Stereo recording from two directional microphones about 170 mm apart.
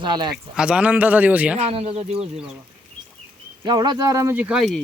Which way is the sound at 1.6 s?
35° right (ahead or behind).